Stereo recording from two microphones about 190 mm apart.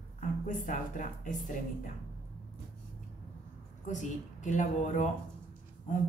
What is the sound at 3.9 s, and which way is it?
Speech, 40° left (ahead or behind).